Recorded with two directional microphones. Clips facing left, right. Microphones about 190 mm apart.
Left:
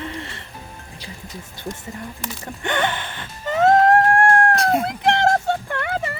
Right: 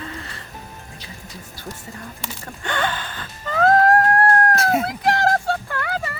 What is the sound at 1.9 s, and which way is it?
Speech, 20° left (ahead or behind).